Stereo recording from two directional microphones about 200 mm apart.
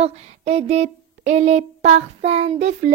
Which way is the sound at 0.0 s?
30° right (ahead or behind).